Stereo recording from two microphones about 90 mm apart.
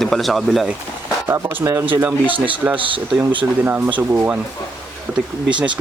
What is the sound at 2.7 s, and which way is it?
Speech, 70° right (ahead or behind).